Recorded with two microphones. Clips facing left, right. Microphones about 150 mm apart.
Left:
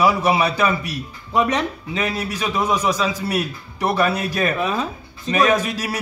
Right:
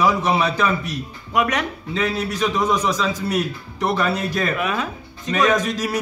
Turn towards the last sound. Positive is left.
turn(degrees=10)  # may be behind; listen again after turning